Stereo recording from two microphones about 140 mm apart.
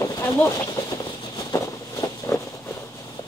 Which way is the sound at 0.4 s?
25° left (ahead or behind).